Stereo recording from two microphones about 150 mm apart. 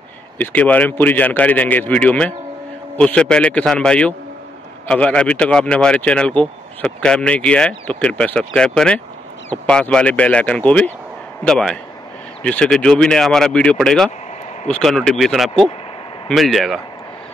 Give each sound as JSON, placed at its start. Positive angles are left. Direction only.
{"t": 0.4, "sound": "speech", "side_deg": 10}